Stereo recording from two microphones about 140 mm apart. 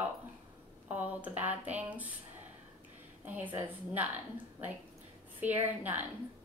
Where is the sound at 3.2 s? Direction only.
10° right (ahead or behind).